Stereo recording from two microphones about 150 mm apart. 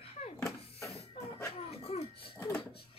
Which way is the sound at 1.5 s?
45° left (ahead or behind).